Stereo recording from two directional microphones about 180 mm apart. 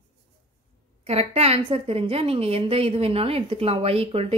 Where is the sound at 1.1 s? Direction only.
35° right (ahead or behind).